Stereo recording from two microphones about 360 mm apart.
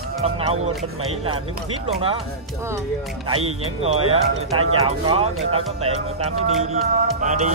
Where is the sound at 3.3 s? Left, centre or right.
Centre.